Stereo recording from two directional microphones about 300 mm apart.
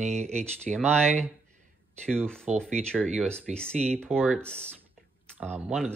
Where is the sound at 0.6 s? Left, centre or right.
Centre.